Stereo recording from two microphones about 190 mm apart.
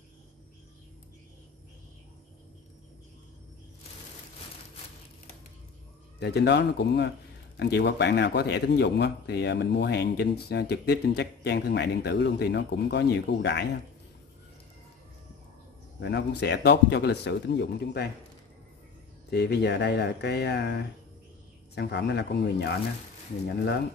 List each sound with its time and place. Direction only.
6.1 s speech: 60° left (ahead or behind)
16.0 s speech: 65° left (ahead or behind)
19.3 s speech: 60° left (ahead or behind)